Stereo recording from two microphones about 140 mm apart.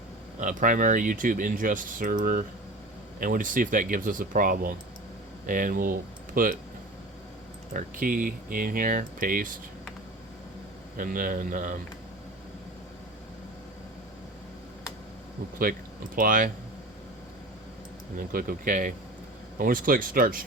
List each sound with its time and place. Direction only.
0.3 s speech: 70° right (ahead or behind); by 4.7 s 85° right
5.5 s speech: 75° right (ahead or behind)
7.7 s speech: 70° right (ahead or behind)
10.9 s speech: 85° right
16.1 s speech: 75° right (ahead or behind)
18.2 s speech: 85° right
19.5 s speech: 85° right